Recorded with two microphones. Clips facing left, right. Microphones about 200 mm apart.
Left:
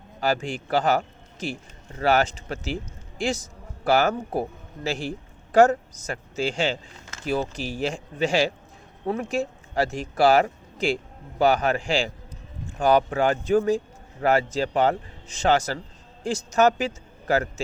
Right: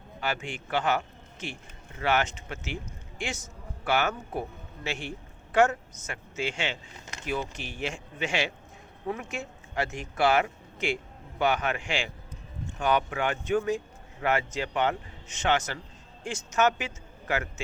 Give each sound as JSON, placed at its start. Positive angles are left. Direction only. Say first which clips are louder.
{"t": 0.2, "sound": "a man's voice", "louder": "left 8 dB", "side_deg": 35}